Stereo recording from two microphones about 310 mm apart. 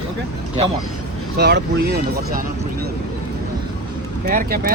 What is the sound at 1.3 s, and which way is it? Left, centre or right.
Speech, right.